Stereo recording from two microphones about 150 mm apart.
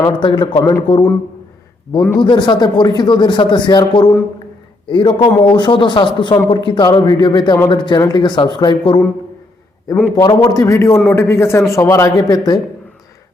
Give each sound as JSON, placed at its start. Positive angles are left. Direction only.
{"t": 0.2, "sound": "speech", "side_deg": 30}
{"t": 2.1, "sound": "speech", "side_deg": 30}
{"t": 9.9, "sound": "a man's voice", "side_deg": 15}